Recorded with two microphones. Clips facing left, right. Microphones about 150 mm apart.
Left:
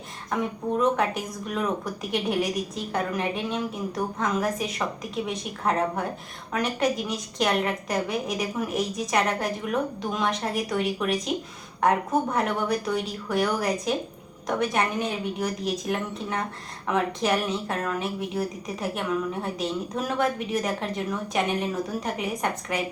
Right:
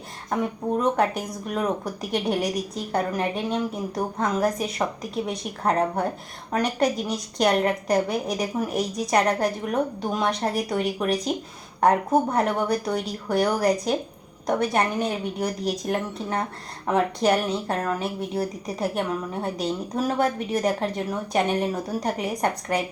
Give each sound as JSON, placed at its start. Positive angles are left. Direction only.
{"t": 0.8, "sound": "speech", "side_deg": -35}